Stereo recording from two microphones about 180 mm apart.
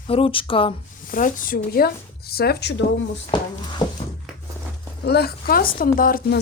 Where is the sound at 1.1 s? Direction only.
45° left (ahead or behind); by 2.8 s 65° left (ahead or behind).